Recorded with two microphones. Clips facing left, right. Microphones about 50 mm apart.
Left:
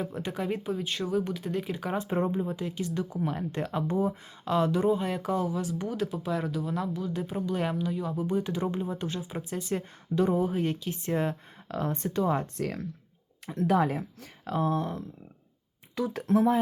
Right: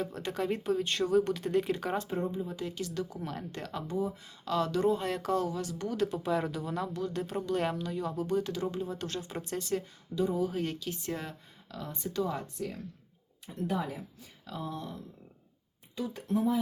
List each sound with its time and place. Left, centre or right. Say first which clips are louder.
0.0 s speech: left 1 dB; centre
2.1 s speech: left 5 dB; left
2.6 s speech: left 3 dB; centre
3.8 s speech: left 5 dB; left
4.9 s speech: left 1 dB; centre
10.2 s speech: left 5 dB; left
10.4 s speech: left 4 dB; left
11.7 s speech: left 8 dB; left
12.1 s speech: left 5 dB; left
12.5 s speech: left 5 dB; left
13.5 s speech: left 8 dB; left
13.8 s speech: left 9 dB; left
16.0 s speech: left 6 dB; left